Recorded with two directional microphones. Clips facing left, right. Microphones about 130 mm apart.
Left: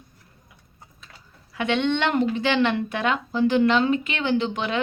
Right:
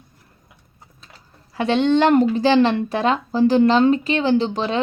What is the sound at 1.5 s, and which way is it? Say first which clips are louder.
A woman's voice: right 6 dB; 35° right (ahead or behind).